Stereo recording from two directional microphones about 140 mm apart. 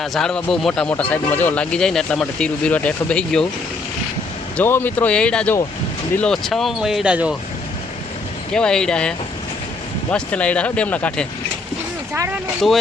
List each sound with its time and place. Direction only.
0.0 s speech: 5° left (ahead or behind)
4.5 s speech: 15° left (ahead or behind); by 7.3 s 10° right (ahead or behind)
8.5 s speech: 5° left (ahead or behind)
12.1 s vehicle: 20° right (ahead or behind)
12.6 s speech: centre (ahead or behind)